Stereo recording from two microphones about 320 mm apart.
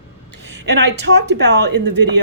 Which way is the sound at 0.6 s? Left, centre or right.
Right.